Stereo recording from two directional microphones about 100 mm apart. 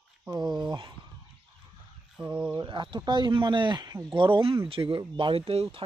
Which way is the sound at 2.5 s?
55° right (ahead or behind).